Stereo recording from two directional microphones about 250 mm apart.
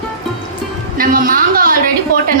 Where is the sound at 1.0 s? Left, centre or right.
Right.